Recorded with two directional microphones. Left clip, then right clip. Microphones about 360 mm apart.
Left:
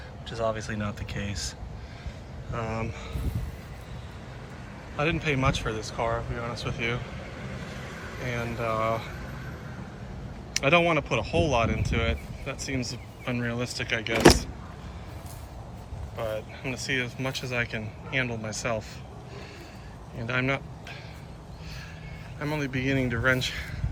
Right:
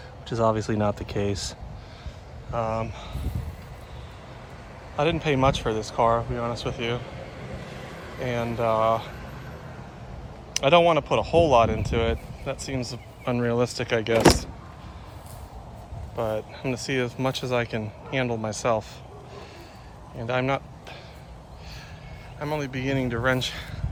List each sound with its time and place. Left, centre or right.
0.3 s speech: centre
4.9 s speech: centre
7.1 s vehicle: right
8.3 s speech: centre
10.5 s speech: centre
16.1 s speech: centre
20.1 s speech: centre
22.4 s speech: centre